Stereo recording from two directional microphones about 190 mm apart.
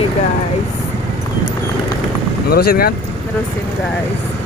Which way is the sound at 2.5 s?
55° left (ahead or behind).